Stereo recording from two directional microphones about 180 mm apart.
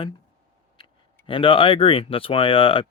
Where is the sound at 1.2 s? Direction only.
30° left (ahead or behind).